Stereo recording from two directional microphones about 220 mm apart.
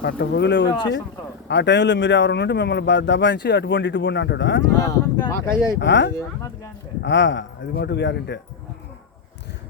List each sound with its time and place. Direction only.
0.0 s speech: 50° left (ahead or behind)
4.8 s speech: 15° left (ahead or behind)
5.8 s speech: 55° left (ahead or behind)